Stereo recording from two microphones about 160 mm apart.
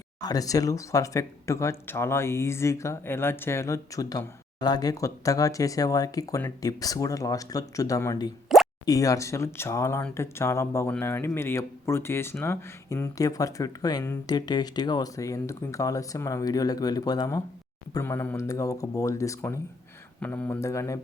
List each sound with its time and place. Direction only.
0.2 s speech: 25° left (ahead or behind)
8.5 s plop: centre (ahead or behind)
8.9 s speech: 20° left (ahead or behind)